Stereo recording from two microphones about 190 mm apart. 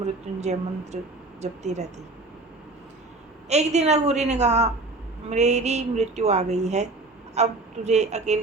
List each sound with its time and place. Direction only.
0.0 s a woman's voice: 35° right (ahead or behind)
3.5 s a woman's voice: 35° right (ahead or behind)